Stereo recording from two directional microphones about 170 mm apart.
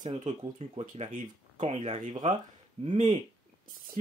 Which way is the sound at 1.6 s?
40° right (ahead or behind).